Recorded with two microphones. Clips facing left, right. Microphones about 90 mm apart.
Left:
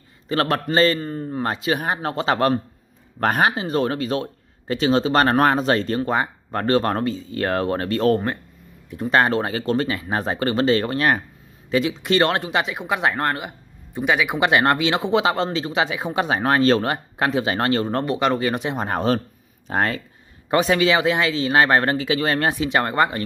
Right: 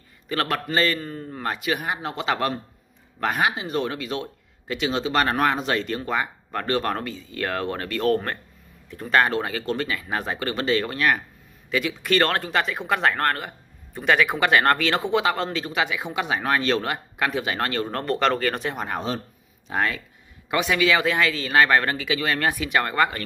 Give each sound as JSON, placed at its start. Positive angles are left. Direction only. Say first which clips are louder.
{"t": 0.3, "sound": "speech", "louder": "left 4 dB", "side_deg": 30}
{"t": 1.9, "sound": "speech", "louder": "left 4 dB", "side_deg": 45}
{"t": 14.4, "sound": "speech", "louder": "left 2 dB", "side_deg": 20}
{"t": 18.0, "sound": "speech", "louder": "left 2 dB", "side_deg": 15}
{"t": 18.9, "sound": "speech", "louder": "left 7 dB", "side_deg": 50}